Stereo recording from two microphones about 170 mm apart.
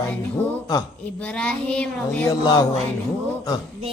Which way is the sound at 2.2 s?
20° left (ahead or behind).